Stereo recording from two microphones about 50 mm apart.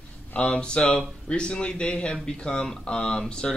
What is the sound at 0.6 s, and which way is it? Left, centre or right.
Speech, centre.